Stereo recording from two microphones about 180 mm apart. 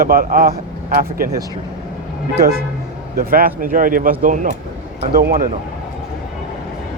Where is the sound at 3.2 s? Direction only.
55° right (ahead or behind).